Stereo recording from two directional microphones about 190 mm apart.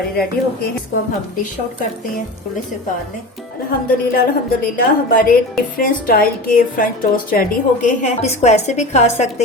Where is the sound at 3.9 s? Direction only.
50° left (ahead or behind).